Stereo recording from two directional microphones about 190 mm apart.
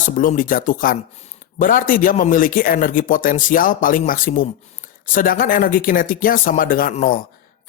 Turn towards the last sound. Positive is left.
turn(degrees=45)  # may be behind; listen again after turning